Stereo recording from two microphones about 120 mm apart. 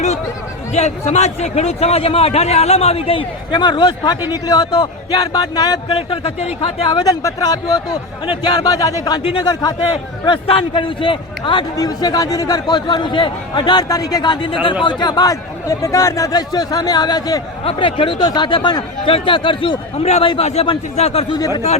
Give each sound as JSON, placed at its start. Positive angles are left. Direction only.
{"t": 0.7, "sound": "a man's voice", "side_deg": 65}
{"t": 6.0, "sound": "a man's voice", "side_deg": 50}
{"t": 7.2, "sound": "a man's voice", "side_deg": 30}
{"t": 9.6, "sound": "a man's voice", "side_deg": 40}
{"t": 11.8, "sound": "a man's voice", "side_deg": 30}
{"t": 17.7, "sound": "a man's voice", "side_deg": 45}
{"t": 20.0, "sound": "a man's voice", "side_deg": 60}
{"t": 21.3, "sound": "a man's voice", "side_deg": 35}